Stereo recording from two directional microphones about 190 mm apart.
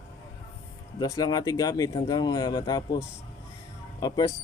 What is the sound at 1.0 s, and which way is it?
Speech, 20° left (ahead or behind).